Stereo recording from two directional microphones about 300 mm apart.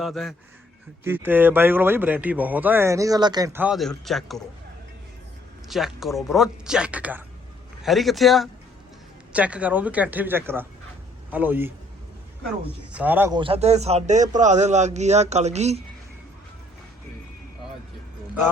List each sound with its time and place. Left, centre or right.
0.0 s speech: centre
5.6 s speech: centre
12.9 s a man's voice: centre; by 15.8 s right